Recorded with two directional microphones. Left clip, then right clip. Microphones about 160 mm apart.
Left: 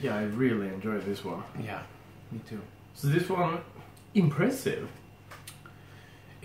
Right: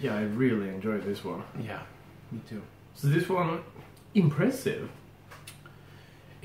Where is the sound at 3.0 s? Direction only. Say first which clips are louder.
Even; 10° right (ahead or behind).